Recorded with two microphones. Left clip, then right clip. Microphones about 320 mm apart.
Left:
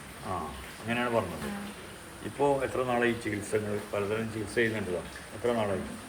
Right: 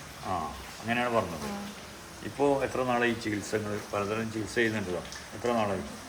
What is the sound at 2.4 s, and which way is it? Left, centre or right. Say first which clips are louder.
Speech: right 1 dB; right.